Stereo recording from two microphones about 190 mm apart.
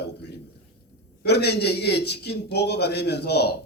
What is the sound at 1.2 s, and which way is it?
Speech, 60° left (ahead or behind).